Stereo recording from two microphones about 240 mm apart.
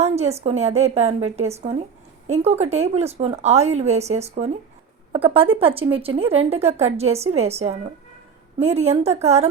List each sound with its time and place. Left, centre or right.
0.0 s a woman's voice: right